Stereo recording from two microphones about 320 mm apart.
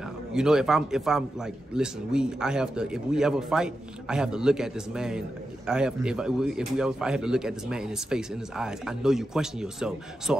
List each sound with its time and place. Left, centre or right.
0.3 s a man's voice: centre